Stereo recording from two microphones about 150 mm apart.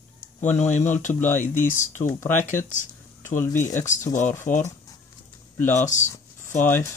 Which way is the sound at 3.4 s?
15° left (ahead or behind).